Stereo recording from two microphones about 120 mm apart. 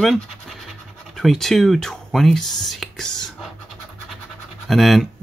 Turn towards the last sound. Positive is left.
turn(degrees=0)  # may be behind; listen again after turning